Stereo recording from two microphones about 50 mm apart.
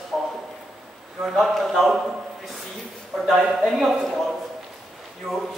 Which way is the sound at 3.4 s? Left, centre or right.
Centre.